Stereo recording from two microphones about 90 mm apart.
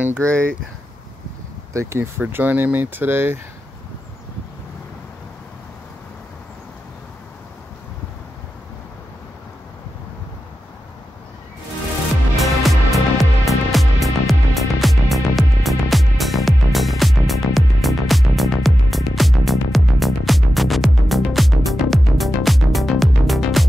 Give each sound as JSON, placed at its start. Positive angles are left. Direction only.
{"t": 0.2, "sound": "speech", "side_deg": 10}
{"t": 1.7, "sound": "speech", "side_deg": -30}
{"t": 12.4, "sound": "music", "side_deg": 0}